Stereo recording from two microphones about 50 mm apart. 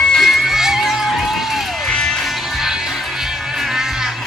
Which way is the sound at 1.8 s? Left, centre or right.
Centre.